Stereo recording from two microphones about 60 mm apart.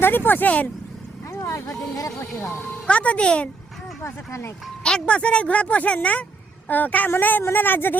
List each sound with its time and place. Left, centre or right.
0.0 s speech: left
1.3 s speech: left
2.4 s speech: left
2.8 s speech: left
4.0 s speech: left
4.8 s speech: centre; by 7.9 s left